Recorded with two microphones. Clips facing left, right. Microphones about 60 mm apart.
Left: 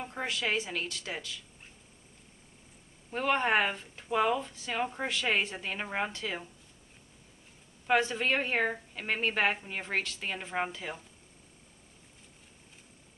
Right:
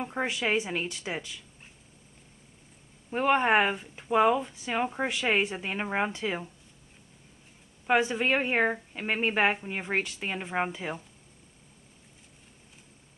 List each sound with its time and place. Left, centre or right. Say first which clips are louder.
0.0 s speech: right 4 dB; centre
3.1 s speech: right 4 dB; centre
7.8 s speech: right 3 dB; centre